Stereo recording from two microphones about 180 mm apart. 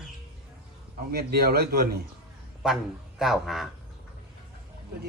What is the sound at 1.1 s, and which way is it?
Speech, 60° right (ahead or behind).